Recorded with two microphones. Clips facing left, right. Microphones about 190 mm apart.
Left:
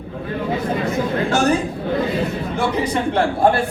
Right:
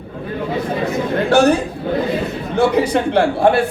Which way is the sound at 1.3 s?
65° right (ahead or behind).